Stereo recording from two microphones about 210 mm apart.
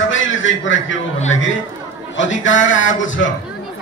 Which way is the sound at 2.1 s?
65° left (ahead or behind).